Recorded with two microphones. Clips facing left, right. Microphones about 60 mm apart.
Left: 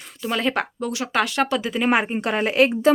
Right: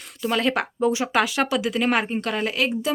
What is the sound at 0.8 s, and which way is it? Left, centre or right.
Speech, centre.